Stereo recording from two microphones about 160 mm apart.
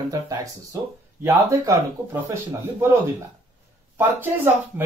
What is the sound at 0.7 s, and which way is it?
Speech, 20° right (ahead or behind).